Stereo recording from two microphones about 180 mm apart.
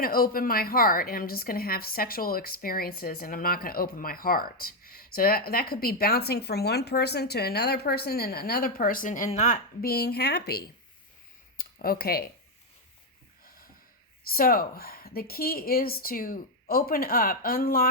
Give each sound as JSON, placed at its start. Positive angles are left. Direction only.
{"t": 0.0, "sound": "a woman's voice", "side_deg": 55}
{"t": 9.8, "sound": "a woman's voice", "side_deg": 60}
{"t": 11.5, "sound": "a sound", "side_deg": 55}
{"t": 14.3, "sound": "a woman's voice", "side_deg": 55}